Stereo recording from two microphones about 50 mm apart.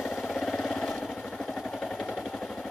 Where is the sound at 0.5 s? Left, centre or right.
Centre.